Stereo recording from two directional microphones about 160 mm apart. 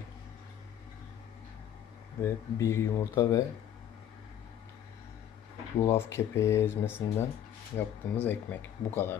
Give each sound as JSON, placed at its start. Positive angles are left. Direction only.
{"t": 2.2, "sound": "speech", "side_deg": 15}
{"t": 5.8, "sound": "speech", "side_deg": 15}